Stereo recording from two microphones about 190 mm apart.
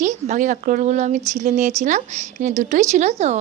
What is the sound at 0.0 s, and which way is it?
Speech, 40° right (ahead or behind).